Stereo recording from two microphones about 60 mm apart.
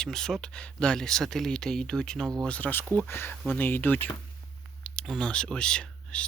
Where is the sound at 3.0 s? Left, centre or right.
Left.